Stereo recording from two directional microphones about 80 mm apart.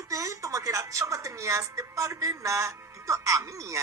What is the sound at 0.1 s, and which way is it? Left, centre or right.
A woman's voice, right.